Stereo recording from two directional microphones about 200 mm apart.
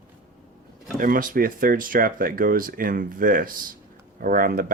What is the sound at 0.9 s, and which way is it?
Speech, 45° right (ahead or behind).